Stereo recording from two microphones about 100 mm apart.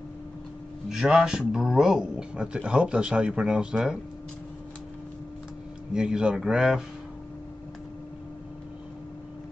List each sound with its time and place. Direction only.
0.8 s speech: 5° right (ahead or behind)
5.9 s speech: 5° right (ahead or behind)